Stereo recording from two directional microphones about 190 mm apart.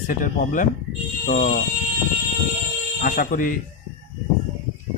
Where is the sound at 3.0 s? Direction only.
45° left (ahead or behind).